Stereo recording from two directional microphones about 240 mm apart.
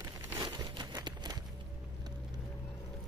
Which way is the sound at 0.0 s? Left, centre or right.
Centre.